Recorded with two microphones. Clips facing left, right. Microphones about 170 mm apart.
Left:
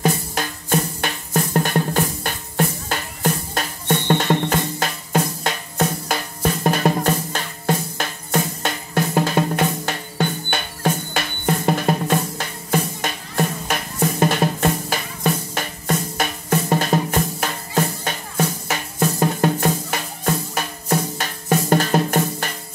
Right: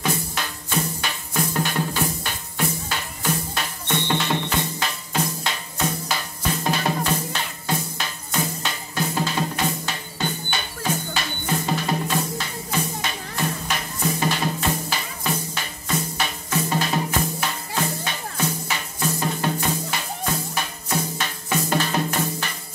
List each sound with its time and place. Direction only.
0.0 s music: 45° left (ahead or behind)
7.6 s drum: 50° left (ahead or behind)
15.5 s music: 50° left (ahead or behind)